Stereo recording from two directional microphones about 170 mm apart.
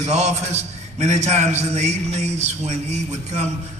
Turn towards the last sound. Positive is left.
turn(degrees=-40)  # may be behind; listen again after turning